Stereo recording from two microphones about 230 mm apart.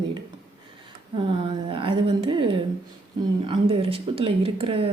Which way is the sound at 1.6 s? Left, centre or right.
Right.